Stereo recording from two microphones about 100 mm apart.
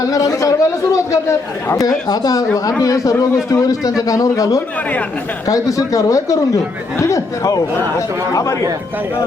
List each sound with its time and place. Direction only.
0.1 s a man's voice: 35° left (ahead or behind)